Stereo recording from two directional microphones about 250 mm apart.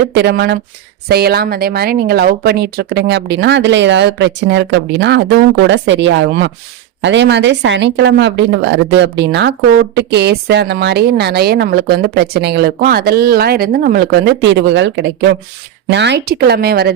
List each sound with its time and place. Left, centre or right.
0.1 s a woman's voice: right